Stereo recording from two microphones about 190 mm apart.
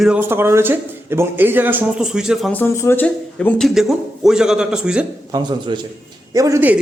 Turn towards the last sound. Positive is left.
turn(degrees=-10)  # may be behind; listen again after turning